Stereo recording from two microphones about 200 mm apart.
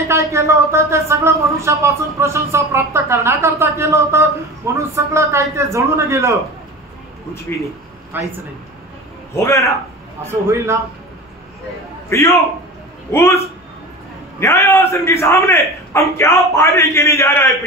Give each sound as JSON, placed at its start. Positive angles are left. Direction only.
{"t": 0.1, "sound": "a sound", "side_deg": -15}
{"t": 4.9, "sound": "a man's voice", "side_deg": -15}
{"t": 8.1, "sound": "a man's voice", "side_deg": -10}
{"t": 9.3, "sound": "a man's voice", "side_deg": 15}
{"t": 10.2, "sound": "a man's voice", "side_deg": -15}
{"t": 12.1, "sound": "a man's voice", "side_deg": 15}
{"t": 14.4, "sound": "a man's voice", "side_deg": 15}